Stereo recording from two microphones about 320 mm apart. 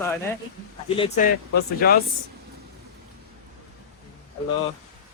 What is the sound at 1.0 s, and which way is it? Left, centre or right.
Speech, left.